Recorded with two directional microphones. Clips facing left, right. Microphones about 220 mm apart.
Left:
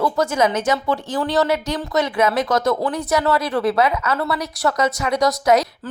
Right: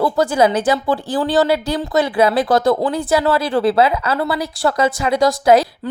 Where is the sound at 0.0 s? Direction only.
35° right (ahead or behind).